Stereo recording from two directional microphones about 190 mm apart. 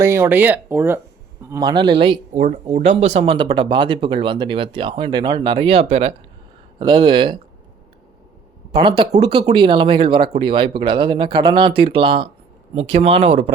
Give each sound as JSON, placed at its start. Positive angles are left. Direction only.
{"t": 0.0, "sound": "speech", "side_deg": -15}
{"t": 2.4, "sound": "speech", "side_deg": -40}
{"t": 8.8, "sound": "speech", "side_deg": -25}